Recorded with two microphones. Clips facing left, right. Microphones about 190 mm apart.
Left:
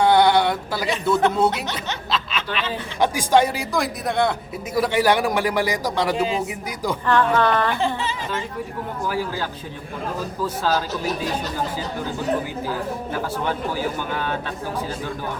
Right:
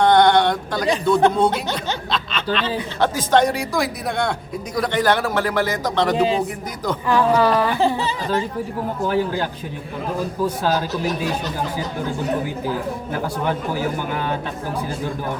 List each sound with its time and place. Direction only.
0.0 s a sound: 5° left (ahead or behind)
1.1 s speech: 5° left (ahead or behind)
2.0 s snicker: 5° left (ahead or behind)
3.0 s a man's voice: 10° left (ahead or behind)
6.2 s speech: 35° right (ahead or behind)
7.1 s speech: 10° right (ahead or behind)
7.8 s speech: 35° right (ahead or behind)
9.0 s speech: 20° right (ahead or behind)